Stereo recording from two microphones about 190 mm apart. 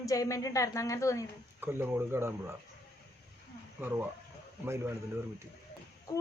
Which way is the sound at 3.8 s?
10° right (ahead or behind).